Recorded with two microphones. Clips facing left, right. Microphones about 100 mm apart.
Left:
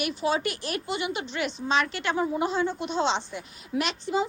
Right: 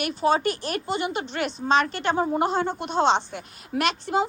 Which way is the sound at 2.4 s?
55° right (ahead or behind).